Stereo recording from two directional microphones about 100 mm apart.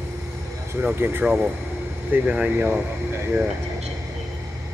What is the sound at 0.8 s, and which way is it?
Speech, 20° right (ahead or behind).